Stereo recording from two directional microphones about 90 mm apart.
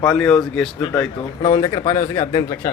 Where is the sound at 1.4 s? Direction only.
75° left (ahead or behind); by 2.5 s 55° left (ahead or behind).